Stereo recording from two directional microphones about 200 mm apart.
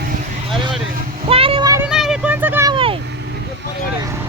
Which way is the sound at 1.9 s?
5° right (ahead or behind).